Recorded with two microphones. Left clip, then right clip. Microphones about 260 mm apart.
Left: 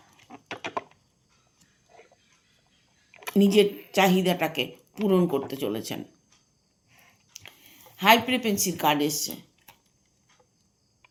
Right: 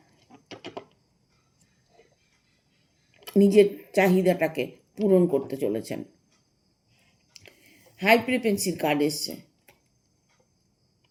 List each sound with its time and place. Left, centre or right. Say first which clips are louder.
3.3 s speech: right 2 dB; left
3.8 s speech: even; centre
7.3 s speech: left 3 dB; left